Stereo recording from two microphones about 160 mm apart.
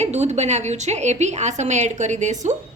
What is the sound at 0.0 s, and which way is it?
A woman's voice, 45° right (ahead or behind).